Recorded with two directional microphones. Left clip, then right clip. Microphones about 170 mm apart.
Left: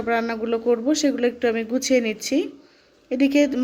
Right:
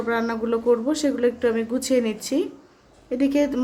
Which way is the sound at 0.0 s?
25° left (ahead or behind).